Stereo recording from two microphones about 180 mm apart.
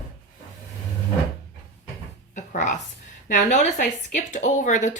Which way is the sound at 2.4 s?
45° left (ahead or behind).